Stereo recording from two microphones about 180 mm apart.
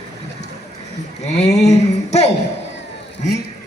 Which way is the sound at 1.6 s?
35° left (ahead or behind).